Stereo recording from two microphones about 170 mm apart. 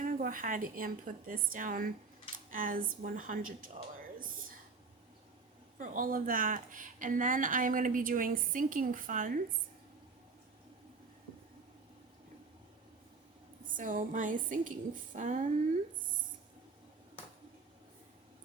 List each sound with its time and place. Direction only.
0.0 s speech: 55° right (ahead or behind)
5.8 s speech: 50° right (ahead or behind)
13.7 s speech: 50° right (ahead or behind)